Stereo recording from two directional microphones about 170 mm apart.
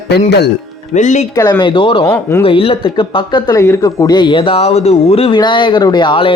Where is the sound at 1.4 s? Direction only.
25° left (ahead or behind).